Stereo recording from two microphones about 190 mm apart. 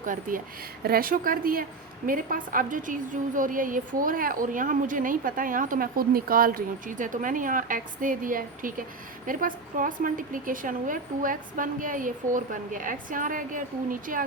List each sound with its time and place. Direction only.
0.0 s a woman's voice: 45° right (ahead or behind)